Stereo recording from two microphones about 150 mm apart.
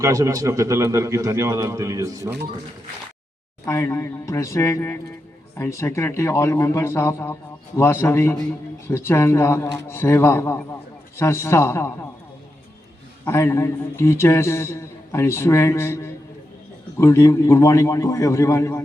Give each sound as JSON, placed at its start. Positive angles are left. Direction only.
{"t": 0.0, "sound": "a man's voice", "side_deg": -20}
{"t": 3.7, "sound": "a man's voice", "side_deg": 20}
{"t": 13.2, "sound": "a man's voice", "side_deg": 20}